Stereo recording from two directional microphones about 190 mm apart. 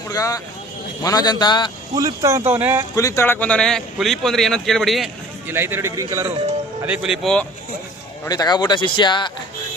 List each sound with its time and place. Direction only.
0.1 s speech: 20° left (ahead or behind)
2.0 s speech: 15° right (ahead or behind)
2.9 s speech: 15° left (ahead or behind); by 5.1 s centre (ahead or behind)
5.5 s speech: 10° right (ahead or behind)
6.8 s speech: 5° right (ahead or behind)
8.2 s speech: 20° left (ahead or behind)